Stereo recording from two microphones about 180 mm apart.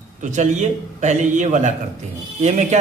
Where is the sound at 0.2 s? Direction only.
40° right (ahead or behind).